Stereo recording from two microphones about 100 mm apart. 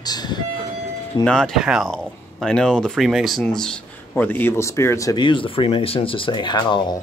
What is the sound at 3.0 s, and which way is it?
Speech, 5° right (ahead or behind).